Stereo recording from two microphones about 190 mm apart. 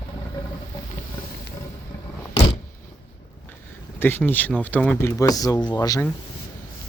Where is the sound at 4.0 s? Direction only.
10° left (ahead or behind).